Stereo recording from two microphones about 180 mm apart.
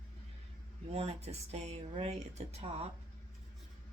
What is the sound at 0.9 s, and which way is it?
Speech, 35° right (ahead or behind).